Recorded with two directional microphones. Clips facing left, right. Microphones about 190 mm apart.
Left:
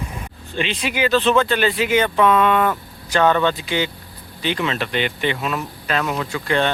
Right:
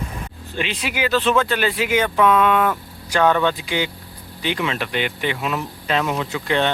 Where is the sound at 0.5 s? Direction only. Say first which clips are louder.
Left 2 dB; 5° right (ahead or behind).